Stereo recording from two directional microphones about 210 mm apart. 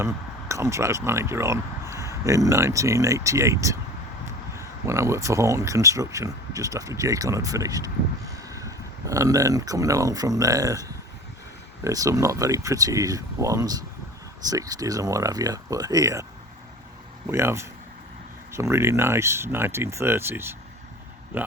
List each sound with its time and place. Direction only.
0.0 s speech: 15° right (ahead or behind)
17.2 s speech: 10° right (ahead or behind)